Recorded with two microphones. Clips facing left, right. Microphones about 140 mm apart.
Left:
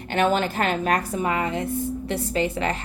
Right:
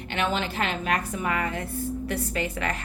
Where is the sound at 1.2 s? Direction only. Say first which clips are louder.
Left 4 dB; 25° left (ahead or behind).